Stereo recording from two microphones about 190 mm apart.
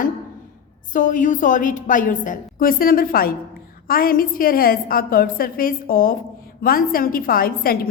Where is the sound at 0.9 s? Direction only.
45° left (ahead or behind).